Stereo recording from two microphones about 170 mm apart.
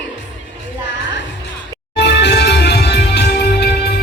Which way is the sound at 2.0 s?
90° left.